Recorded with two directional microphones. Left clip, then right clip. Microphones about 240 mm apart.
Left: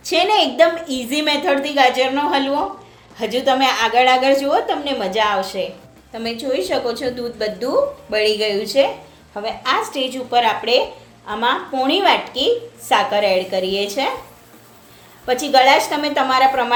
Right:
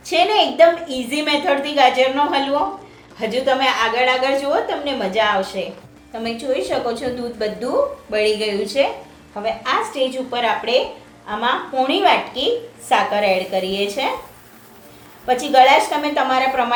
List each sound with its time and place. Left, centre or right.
0.0 s a woman's voice: left
15.3 s a woman's voice: left